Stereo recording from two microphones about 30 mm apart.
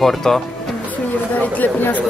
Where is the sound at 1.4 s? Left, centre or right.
Left.